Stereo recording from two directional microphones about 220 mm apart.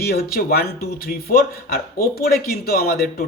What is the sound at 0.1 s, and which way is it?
Speech, 45° left (ahead or behind).